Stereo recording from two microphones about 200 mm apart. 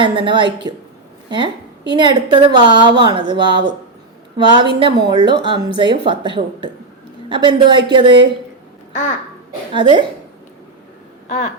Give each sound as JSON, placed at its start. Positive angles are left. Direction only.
{"t": 0.0, "sound": "speech", "side_deg": -25}
{"t": 1.9, "sound": "speech", "side_deg": -20}
{"t": 8.9, "sound": "speech", "side_deg": 40}
{"t": 9.7, "sound": "speech", "side_deg": -25}